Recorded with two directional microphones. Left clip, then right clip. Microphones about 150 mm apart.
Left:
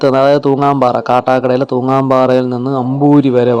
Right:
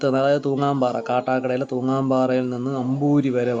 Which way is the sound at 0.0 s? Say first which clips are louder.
Left 10 dB; 35° left (ahead or behind).